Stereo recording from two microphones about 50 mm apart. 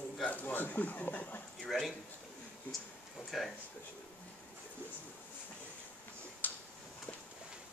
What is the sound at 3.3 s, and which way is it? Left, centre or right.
Speech, centre.